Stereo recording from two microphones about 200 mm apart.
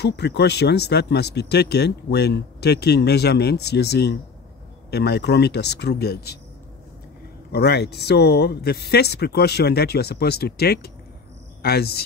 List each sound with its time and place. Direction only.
0.0 s speech: 60° left (ahead or behind)
7.5 s speech: 55° left (ahead or behind)